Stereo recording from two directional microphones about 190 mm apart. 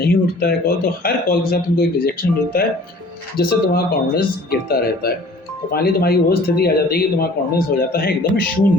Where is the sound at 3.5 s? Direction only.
55° left (ahead or behind).